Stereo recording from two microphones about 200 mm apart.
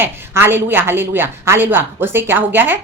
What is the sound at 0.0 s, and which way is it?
A woman's voice, 10° right (ahead or behind).